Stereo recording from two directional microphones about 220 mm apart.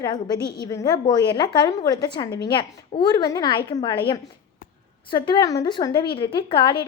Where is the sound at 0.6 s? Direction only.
15° left (ahead or behind).